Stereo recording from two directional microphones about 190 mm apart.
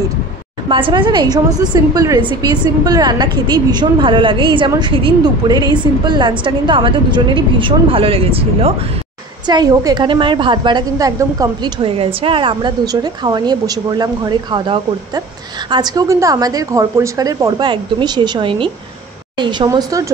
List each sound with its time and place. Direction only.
0.7 s a woman's voice: 25° right (ahead or behind)
9.5 s a woman's voice: 20° right (ahead or behind)